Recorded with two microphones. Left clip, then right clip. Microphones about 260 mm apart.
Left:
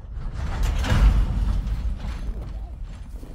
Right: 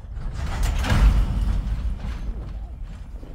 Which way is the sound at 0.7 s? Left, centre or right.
Centre.